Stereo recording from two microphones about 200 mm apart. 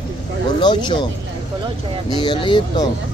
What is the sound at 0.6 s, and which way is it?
Speech, 20° left (ahead or behind).